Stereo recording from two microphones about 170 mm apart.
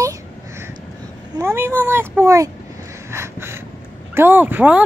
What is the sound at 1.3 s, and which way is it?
Speech, 20° right (ahead or behind).